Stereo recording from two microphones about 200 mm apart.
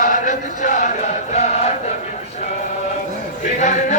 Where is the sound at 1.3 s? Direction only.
30° left (ahead or behind).